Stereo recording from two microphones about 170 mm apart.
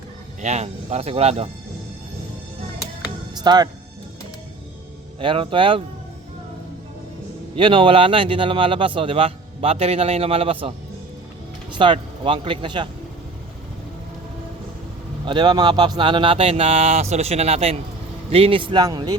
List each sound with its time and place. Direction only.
0.4 s speech: 40° right (ahead or behind)
3.3 s speech: 25° right (ahead or behind)
5.2 s speech: 30° right (ahead or behind)
7.5 s speech: 30° right (ahead or behind)
11.7 s speech: 30° right (ahead or behind)
15.2 s a man's voice: 25° right (ahead or behind)